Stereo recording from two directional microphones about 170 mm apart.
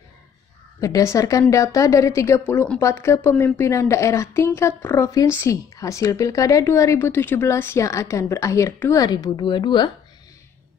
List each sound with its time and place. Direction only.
0.7 s a woman's voice: 20° left (ahead or behind)